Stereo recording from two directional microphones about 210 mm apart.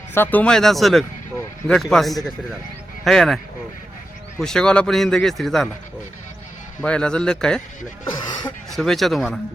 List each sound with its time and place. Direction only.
0.1 s a man's voice: 10° left (ahead or behind)
6.8 s a man's voice: 5° left (ahead or behind)
8.1 s speech: 20° left (ahead or behind)
8.7 s a man's voice: centre (ahead or behind)